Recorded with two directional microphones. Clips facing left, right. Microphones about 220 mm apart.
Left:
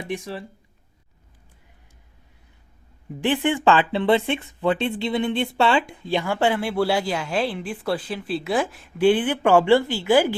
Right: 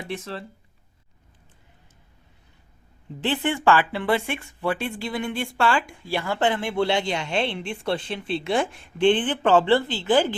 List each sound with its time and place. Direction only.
0.1 s speech: 15° left (ahead or behind)
3.2 s speech: 15° left (ahead or behind)